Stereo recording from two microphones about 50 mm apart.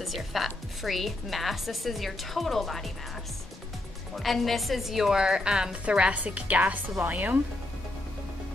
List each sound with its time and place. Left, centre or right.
0.0 s a woman's voice: centre
4.1 s a woman's voice: centre
5.2 s speech: centre; by 7.3 s right